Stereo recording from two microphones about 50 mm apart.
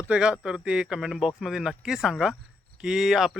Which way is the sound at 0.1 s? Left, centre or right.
Centre.